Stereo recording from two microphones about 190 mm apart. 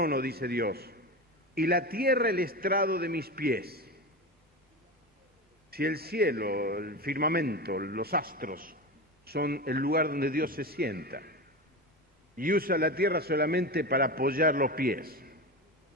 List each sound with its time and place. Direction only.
0.0 s a man's voice: 55° right (ahead or behind)
5.7 s a man's voice: 55° right (ahead or behind)